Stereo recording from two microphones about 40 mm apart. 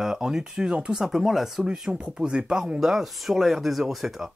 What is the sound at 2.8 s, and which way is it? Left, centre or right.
Speech, centre.